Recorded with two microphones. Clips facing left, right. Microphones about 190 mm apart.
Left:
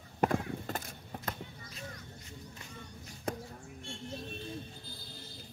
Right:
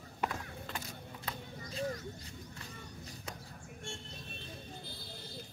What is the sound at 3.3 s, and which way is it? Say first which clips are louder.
Basketball bounce: left 12 dB; 55° left (ahead or behind).